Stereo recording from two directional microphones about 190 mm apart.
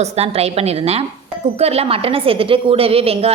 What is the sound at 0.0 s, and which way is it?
A woman's voice, 35° right (ahead or behind).